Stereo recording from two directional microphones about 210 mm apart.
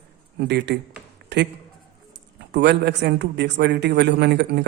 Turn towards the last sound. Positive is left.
turn(degrees=-55)  # may be behind; listen again after turning